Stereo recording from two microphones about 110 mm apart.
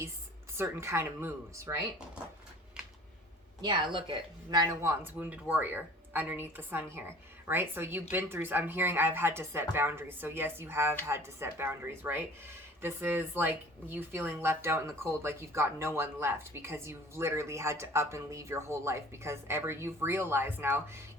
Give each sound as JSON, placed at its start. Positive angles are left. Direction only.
{"t": 0.5, "sound": "speech", "side_deg": -25}
{"t": 3.6, "sound": "a woman's voice", "side_deg": -45}
{"t": 4.7, "sound": "speech", "side_deg": -30}
{"t": 5.1, "sound": "speech", "side_deg": -15}